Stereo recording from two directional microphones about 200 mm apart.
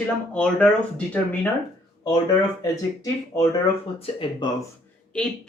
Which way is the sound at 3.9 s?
25° left (ahead or behind).